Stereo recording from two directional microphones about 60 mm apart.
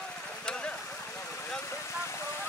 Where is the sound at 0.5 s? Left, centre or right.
Centre.